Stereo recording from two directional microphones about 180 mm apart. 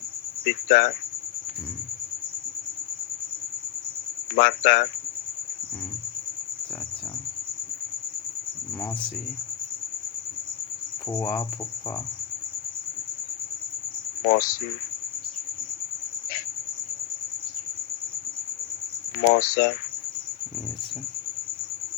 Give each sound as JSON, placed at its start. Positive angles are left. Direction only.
{"t": 0.4, "sound": "speech", "side_deg": 45}
{"t": 4.4, "sound": "speech", "side_deg": 45}
{"t": 11.1, "sound": "cricket", "side_deg": 15}
{"t": 14.3, "sound": "speech", "side_deg": 50}
{"t": 19.3, "sound": "speech", "side_deg": 55}